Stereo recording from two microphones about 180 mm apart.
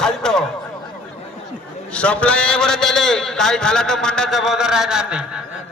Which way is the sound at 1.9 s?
5° left (ahead or behind).